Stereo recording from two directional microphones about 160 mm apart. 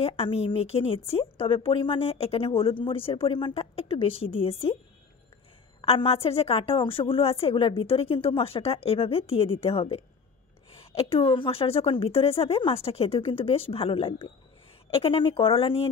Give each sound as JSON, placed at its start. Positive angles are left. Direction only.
{"t": 0.0, "sound": "a woman's voice", "side_deg": 35}
{"t": 5.8, "sound": "a woman's voice", "side_deg": 35}